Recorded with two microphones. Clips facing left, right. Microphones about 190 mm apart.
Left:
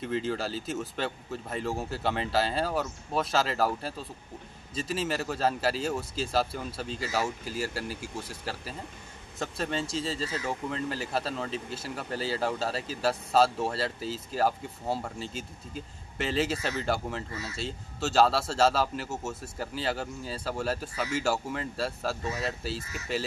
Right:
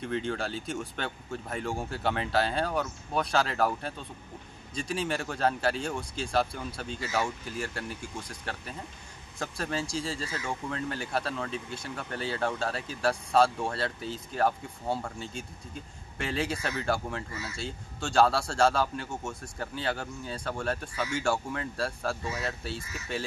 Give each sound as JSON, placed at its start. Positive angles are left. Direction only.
{"t": 0.0, "sound": "speech", "side_deg": 0}
{"t": 10.1, "sound": "speech", "side_deg": 25}
{"t": 10.4, "sound": "speech", "side_deg": 0}
{"t": 12.1, "sound": "speech", "side_deg": 30}
{"t": 12.4, "sound": "speech", "side_deg": 5}
{"t": 16.3, "sound": "speech", "side_deg": 0}
{"t": 22.2, "sound": "speech", "side_deg": 30}